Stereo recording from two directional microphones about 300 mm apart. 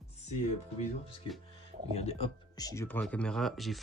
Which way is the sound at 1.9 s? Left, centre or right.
Left.